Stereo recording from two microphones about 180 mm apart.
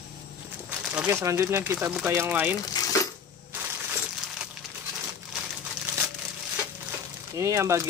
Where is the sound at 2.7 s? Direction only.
20° left (ahead or behind).